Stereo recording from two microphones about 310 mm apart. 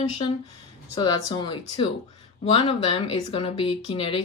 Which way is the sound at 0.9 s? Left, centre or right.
Centre.